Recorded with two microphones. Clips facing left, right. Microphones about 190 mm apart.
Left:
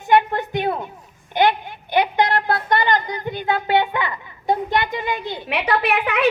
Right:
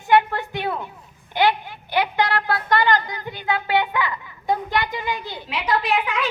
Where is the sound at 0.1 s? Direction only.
20° left (ahead or behind).